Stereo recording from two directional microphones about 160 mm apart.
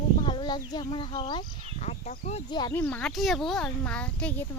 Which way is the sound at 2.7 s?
10° left (ahead or behind).